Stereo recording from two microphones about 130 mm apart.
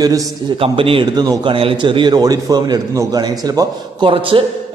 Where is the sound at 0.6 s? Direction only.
45° right (ahead or behind); by 4.1 s 30° right (ahead or behind).